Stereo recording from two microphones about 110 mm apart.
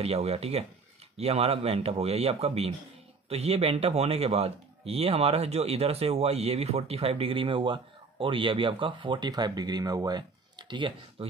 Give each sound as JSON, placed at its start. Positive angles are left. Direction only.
{"t": 0.0, "sound": "speech", "side_deg": -65}
{"t": 10.7, "sound": "speech", "side_deg": -50}